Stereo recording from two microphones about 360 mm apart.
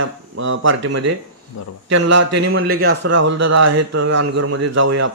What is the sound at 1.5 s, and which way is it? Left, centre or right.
Speech, left.